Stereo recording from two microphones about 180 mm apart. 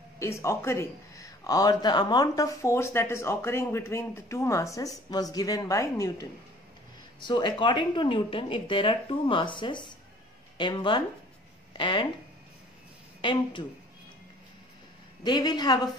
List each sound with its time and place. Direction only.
0.2 s speech: 15° left (ahead or behind)
13.2 s speech: 25° left (ahead or behind)
15.2 s speech: 25° left (ahead or behind)